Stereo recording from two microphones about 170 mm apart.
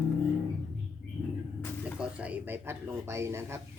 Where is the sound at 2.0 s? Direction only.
10° right (ahead or behind).